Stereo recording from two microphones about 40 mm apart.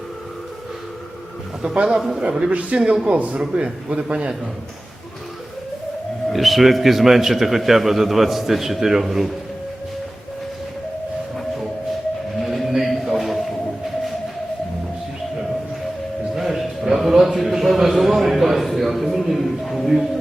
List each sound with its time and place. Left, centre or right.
1.7 s a man's voice: right
2.0 s a man's voice: centre
2.5 s a man's voice: right
2.7 s a man's voice: centre
3.2 s a man's voice: right
3.4 s a man's voice: right
6.3 s a man's voice: centre
11.3 s music: centre
16.3 s a sound: centre